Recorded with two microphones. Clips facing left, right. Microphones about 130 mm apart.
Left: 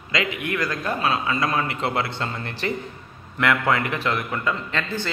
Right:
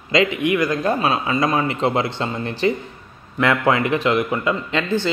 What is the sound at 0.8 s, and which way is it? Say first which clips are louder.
Speech: right 4 dB; 25° right (ahead or behind).